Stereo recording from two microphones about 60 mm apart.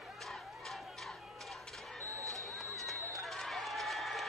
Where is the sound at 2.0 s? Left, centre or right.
Right.